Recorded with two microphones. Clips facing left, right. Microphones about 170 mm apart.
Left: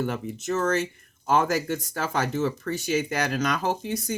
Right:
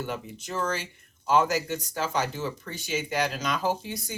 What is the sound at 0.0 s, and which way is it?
Speech, 50° left (ahead or behind).